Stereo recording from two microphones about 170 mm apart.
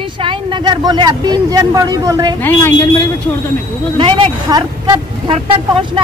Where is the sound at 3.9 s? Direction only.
30° right (ahead or behind).